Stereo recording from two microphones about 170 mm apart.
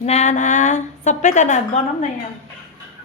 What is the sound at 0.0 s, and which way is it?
A woman's voice, 40° left (ahead or behind).